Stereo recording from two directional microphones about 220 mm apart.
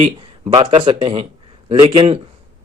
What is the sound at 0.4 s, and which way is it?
A man's voice, 20° right (ahead or behind).